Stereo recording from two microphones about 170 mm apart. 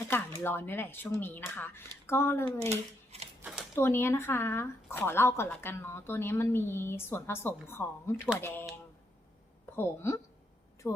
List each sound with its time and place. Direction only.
0.1 s speech: 10° left (ahead or behind)
2.6 s speech: 40° right (ahead or behind)
3.8 s speech: 15° left (ahead or behind)
8.1 s speech: 5° right (ahead or behind)
8.4 s speech: 15° left (ahead or behind)
9.7 s speech: 15° left (ahead or behind)
10.8 s speech: centre (ahead or behind)